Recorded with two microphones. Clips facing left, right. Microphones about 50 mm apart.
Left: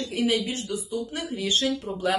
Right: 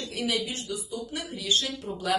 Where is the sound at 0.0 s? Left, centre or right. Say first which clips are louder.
Left 5 dB; left.